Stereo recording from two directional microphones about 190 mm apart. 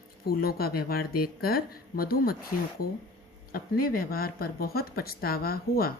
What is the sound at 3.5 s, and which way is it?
Speech, 50° left (ahead or behind).